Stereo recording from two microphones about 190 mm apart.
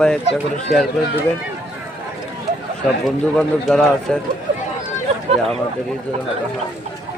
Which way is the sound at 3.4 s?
5° left (ahead or behind).